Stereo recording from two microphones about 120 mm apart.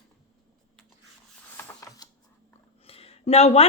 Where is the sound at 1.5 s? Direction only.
30° left (ahead or behind).